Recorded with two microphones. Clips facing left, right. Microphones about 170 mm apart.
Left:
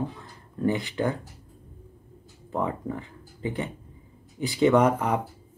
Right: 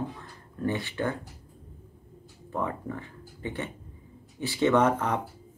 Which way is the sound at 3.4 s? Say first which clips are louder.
Left 4 dB; 15° left (ahead or behind).